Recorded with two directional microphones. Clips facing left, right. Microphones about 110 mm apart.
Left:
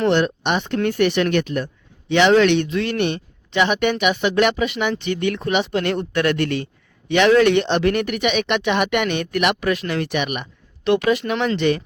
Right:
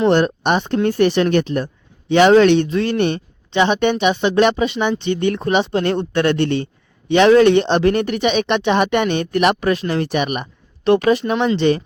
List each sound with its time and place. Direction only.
0.1 s speech: 40° right (ahead or behind)